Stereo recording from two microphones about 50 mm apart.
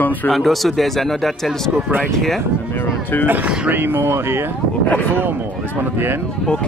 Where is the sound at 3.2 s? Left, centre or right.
Right.